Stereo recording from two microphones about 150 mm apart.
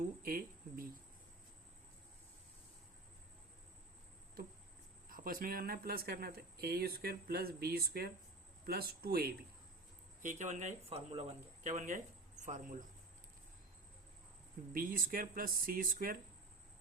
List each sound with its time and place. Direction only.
0.0 s a sound: 70° right (ahead or behind)
5.0 s speech: 70° right (ahead or behind); by 9.3 s 90° right
10.2 s speech: 55° right (ahead or behind)
14.7 s speech: 70° right (ahead or behind)